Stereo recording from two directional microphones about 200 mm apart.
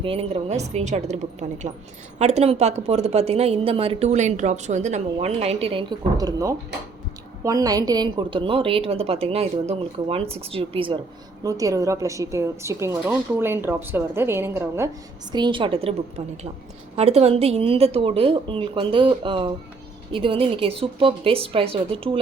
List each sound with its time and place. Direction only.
0.0 s a woman's voice: 30° right (ahead or behind)